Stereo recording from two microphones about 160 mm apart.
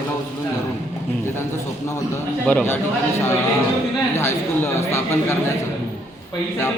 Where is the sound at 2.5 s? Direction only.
5° left (ahead or behind).